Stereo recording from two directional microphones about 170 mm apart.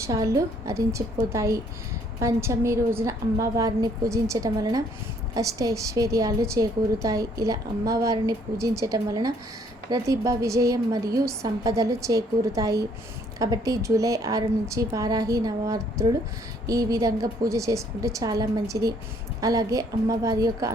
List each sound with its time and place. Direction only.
0.0 s a woman's voice: 20° right (ahead or behind)